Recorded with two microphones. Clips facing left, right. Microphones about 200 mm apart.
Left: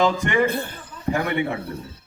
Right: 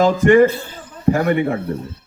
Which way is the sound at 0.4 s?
55° left (ahead or behind).